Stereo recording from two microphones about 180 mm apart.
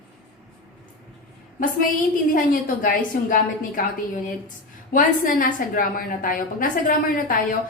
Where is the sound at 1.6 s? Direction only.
50° left (ahead or behind).